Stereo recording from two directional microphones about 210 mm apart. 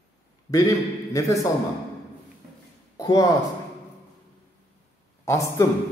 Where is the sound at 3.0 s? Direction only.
15° left (ahead or behind).